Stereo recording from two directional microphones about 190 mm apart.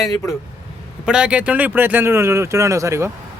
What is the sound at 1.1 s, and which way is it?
Speech, 5° right (ahead or behind).